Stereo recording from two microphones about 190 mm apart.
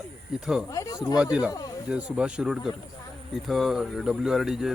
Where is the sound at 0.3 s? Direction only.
5° right (ahead or behind).